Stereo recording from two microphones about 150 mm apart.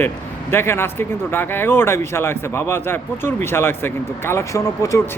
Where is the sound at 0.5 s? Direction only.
15° left (ahead or behind).